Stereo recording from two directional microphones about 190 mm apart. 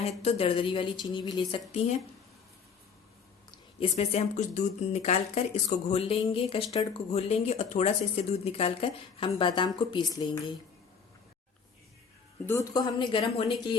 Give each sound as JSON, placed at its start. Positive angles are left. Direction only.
{"t": 0.0, "sound": "speech", "side_deg": 35}
{"t": 3.8, "sound": "speech", "side_deg": 30}
{"t": 12.5, "sound": "speech", "side_deg": 20}